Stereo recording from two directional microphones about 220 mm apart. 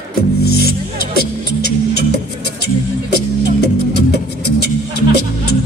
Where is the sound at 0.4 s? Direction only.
45° left (ahead or behind).